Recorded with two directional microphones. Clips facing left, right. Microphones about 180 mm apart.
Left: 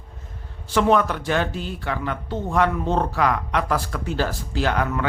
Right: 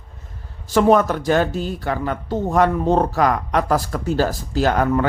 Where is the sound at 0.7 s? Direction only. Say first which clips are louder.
Right 4 dB; 40° right (ahead or behind).